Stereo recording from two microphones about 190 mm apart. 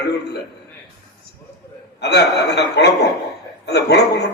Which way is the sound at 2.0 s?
60° left (ahead or behind).